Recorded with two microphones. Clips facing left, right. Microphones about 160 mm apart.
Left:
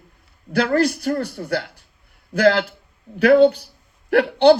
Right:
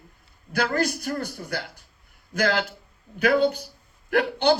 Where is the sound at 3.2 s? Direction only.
30° left (ahead or behind).